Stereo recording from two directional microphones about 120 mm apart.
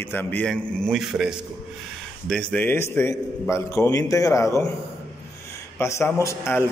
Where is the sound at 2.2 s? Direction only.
10° left (ahead or behind); by 4.7 s 25° left (ahead or behind).